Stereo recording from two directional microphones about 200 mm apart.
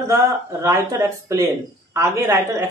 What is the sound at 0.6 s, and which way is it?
Speech, 15° right (ahead or behind).